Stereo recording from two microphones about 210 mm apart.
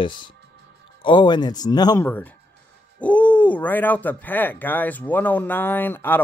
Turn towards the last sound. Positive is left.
turn(degrees=10)  # may be behind; listen again after turning